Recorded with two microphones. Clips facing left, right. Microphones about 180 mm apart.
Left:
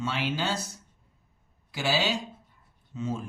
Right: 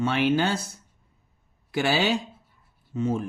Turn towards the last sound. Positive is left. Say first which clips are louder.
# right 6 dB
turn(degrees=-55)  # may be behind; listen again after turning